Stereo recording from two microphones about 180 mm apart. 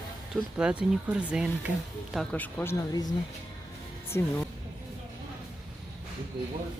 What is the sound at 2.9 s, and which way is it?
Speech, 20° left (ahead or behind).